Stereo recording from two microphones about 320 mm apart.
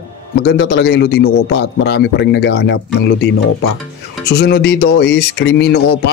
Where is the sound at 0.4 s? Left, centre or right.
Left.